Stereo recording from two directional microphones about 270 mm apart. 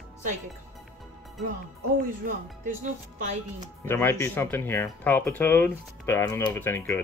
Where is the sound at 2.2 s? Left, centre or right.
Right.